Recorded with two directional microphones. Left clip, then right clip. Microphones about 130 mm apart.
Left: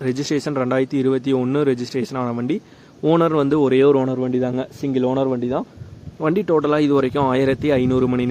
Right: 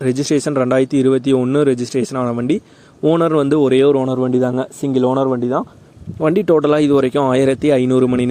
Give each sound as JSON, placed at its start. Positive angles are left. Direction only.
{"t": 0.0, "sound": "speech", "side_deg": -35}
{"t": 6.2, "sound": "speech", "side_deg": -45}